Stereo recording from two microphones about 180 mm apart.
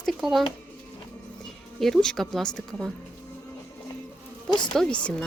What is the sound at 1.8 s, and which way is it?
Speech, centre (ahead or behind).